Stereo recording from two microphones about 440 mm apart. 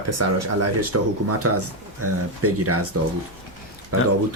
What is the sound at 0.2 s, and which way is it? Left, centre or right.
Speech, right.